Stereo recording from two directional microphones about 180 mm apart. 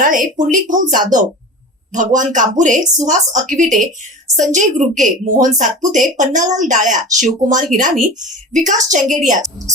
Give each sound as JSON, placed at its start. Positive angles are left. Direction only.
{"t": 0.0, "sound": "a woman's voice", "side_deg": -50}